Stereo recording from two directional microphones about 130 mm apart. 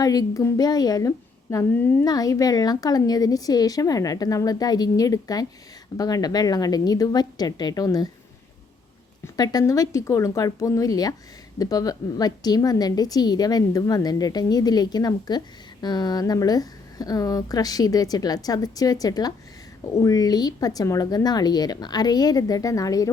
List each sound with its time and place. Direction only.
0.0 s a woman's voice: 30° left (ahead or behind)
2.0 s a woman's voice: 30° left (ahead or behind)
9.2 s a woman's voice: 30° left (ahead or behind)